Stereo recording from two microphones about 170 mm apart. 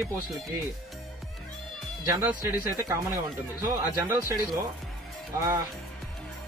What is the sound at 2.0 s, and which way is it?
Speech, 20° right (ahead or behind).